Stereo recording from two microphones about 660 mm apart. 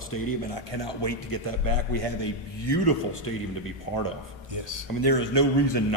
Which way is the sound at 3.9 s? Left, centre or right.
Left.